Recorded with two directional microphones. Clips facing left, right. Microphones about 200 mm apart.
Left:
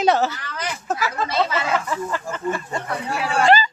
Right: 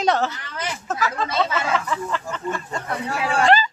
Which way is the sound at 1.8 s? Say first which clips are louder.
Left 1 dB; 5° left (ahead or behind).